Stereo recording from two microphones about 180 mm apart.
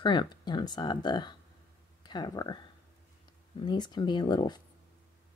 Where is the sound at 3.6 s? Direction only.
25° left (ahead or behind).